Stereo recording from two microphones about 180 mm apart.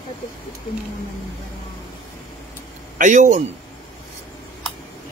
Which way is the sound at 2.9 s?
45° right (ahead or behind).